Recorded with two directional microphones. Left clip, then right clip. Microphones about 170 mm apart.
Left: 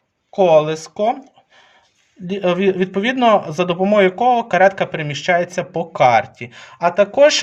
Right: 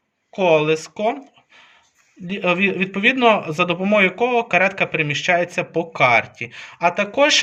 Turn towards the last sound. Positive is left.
turn(degrees=60)  # may be behind; listen again after turning